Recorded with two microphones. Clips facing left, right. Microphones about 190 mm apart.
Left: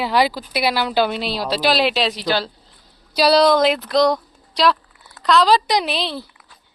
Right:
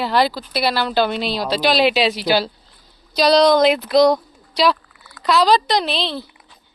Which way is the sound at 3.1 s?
5° left (ahead or behind).